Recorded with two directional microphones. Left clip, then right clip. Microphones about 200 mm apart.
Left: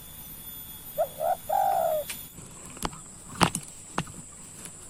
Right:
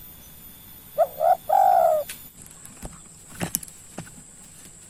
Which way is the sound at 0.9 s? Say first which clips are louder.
Right 8 dB; 35° right (ahead or behind).